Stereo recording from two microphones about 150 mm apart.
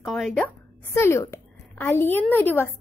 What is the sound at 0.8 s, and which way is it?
A woman's voice, 20° left (ahead or behind).